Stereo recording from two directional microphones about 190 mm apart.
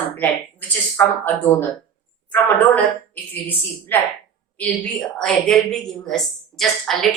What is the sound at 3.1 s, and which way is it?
A woman's voice, 10° left (ahead or behind).